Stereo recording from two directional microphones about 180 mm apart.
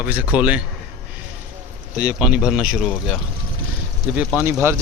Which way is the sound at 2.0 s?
5° right (ahead or behind).